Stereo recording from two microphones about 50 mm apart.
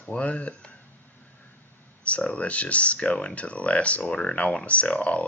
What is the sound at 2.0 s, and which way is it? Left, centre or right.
Speech, left.